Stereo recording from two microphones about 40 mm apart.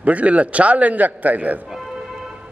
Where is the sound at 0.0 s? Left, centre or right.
Right.